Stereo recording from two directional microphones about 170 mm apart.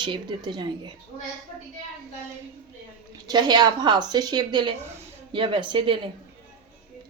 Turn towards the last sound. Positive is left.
turn(degrees=-30)  # may be behind; listen again after turning